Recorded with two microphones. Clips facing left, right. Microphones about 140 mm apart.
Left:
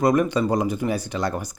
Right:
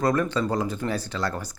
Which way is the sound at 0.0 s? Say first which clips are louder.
Left 4 dB; 15° left (ahead or behind).